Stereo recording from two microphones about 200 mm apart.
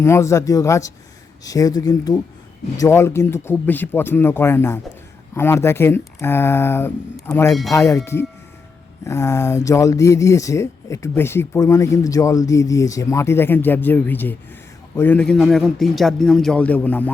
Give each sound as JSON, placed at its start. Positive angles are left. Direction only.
{"t": 0.0, "sound": "a man's voice", "side_deg": 15}